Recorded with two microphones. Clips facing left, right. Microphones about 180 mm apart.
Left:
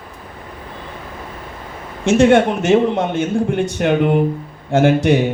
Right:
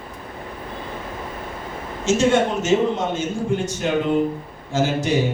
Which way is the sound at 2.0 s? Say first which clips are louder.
Left 6 dB; 60° left (ahead or behind).